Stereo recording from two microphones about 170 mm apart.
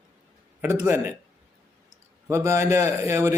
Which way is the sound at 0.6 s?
15° right (ahead or behind).